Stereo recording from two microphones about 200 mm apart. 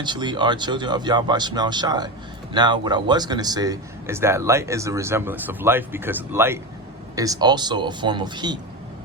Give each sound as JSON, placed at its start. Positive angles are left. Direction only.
{"t": 0.0, "sound": "speech", "side_deg": -20}